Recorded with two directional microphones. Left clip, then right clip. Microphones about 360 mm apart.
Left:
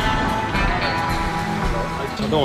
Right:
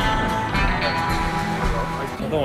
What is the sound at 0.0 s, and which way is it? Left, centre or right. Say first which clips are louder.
Music: left 1 dB; centre.